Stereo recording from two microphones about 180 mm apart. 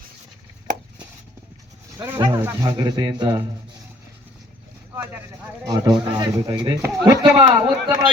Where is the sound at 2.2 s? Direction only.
25° right (ahead or behind).